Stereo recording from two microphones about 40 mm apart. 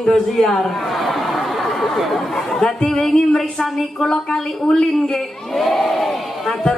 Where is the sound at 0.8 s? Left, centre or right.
Centre.